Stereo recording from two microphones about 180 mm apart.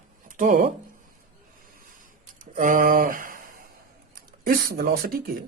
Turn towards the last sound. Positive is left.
turn(degrees=-50)  # may be behind; listen again after turning